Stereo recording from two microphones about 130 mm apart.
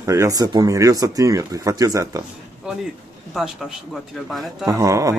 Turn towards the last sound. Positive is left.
turn(degrees=-25)  # may be behind; listen again after turning